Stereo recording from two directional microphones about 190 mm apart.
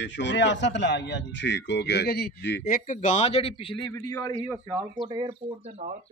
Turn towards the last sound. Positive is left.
turn(degrees=-20)  # may be behind; listen again after turning